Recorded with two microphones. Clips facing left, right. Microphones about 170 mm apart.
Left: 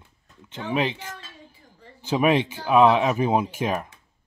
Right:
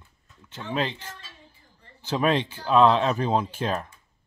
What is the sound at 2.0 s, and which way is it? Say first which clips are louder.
Speech: left 3 dB; 15° left (ahead or behind).